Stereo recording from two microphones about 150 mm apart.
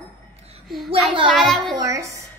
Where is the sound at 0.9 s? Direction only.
35° right (ahead or behind).